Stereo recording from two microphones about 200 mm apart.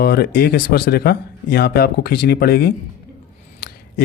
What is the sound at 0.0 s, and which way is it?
Speech, 55° left (ahead or behind).